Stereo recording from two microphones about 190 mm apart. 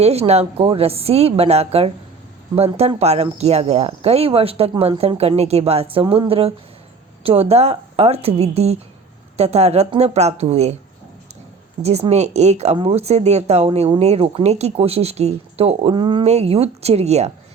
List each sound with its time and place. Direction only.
0.0 s speech: 35° right (ahead or behind)
11.8 s speech: 35° right (ahead or behind)